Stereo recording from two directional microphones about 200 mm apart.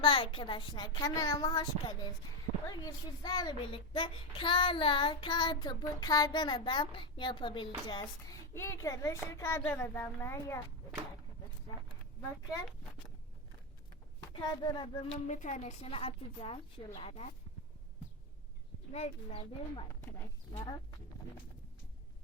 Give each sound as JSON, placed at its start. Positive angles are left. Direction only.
{"t": 0.0, "sound": "a child's voice", "side_deg": 25}
{"t": 14.3, "sound": "a child's voice", "side_deg": 25}
{"t": 15.3, "sound": "a woman's voice", "side_deg": 40}
{"t": 18.9, "sound": "a woman's voice", "side_deg": 30}
{"t": 19.9, "sound": "a child's voice", "side_deg": 10}